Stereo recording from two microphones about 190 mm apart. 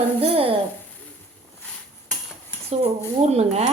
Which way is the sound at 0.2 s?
30° right (ahead or behind).